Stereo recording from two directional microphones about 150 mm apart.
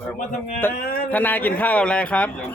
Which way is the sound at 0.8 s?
80° left.